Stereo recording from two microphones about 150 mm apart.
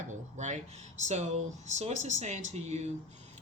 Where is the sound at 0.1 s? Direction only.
55° right (ahead or behind).